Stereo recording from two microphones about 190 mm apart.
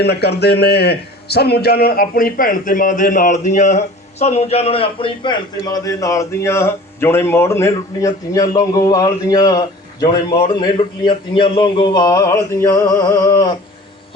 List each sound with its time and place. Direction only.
0.0 s a man's voice: 60° left (ahead or behind); by 13.6 s 20° left (ahead or behind)